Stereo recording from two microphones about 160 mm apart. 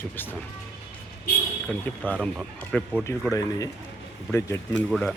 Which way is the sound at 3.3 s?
20° left (ahead or behind).